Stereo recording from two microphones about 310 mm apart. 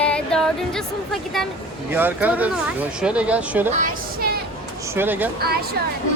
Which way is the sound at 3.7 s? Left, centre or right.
Right.